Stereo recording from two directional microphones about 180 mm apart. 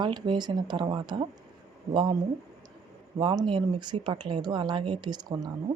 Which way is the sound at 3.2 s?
25° right (ahead or behind).